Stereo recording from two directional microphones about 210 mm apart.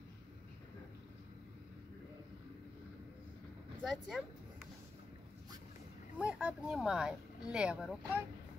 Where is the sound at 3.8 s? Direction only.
Centre (ahead or behind).